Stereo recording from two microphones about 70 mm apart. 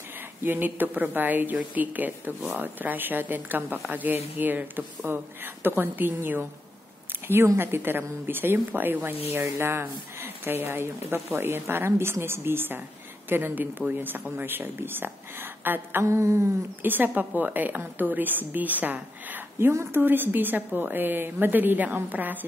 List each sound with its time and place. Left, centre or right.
0.4 s a woman's voice: right
7.5 s a woman's voice: right
16.8 s a woman's voice: right